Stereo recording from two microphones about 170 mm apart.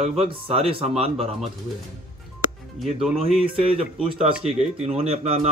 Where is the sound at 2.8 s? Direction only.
Centre (ahead or behind).